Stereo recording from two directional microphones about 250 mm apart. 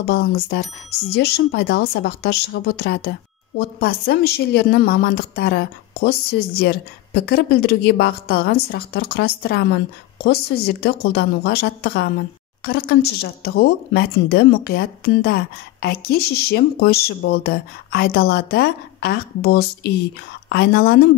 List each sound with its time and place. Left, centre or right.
0.0 s speech: left